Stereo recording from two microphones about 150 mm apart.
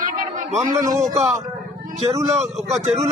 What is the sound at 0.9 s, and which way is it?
Speech, 20° right (ahead or behind).